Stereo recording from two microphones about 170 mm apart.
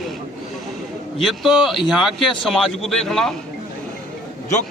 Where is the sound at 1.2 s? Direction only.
Centre (ahead or behind).